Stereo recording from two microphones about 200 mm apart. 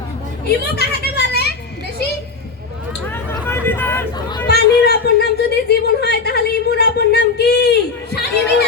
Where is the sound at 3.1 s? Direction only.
10° left (ahead or behind).